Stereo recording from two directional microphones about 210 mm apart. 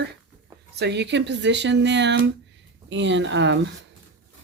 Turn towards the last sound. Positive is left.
turn(degrees=-60)  # may be behind; listen again after turning